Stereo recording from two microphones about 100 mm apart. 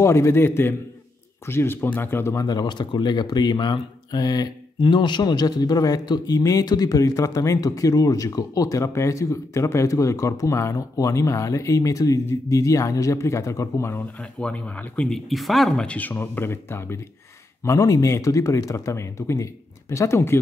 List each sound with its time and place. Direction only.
0.0 s speech: 30° left (ahead or behind)
2.4 s speech: 45° left (ahead or behind); by 14.0 s 25° left (ahead or behind)
14.4 s speech: 10° left (ahead or behind)
16.2 s speech: 25° left (ahead or behind)
17.6 s speech: 35° left (ahead or behind)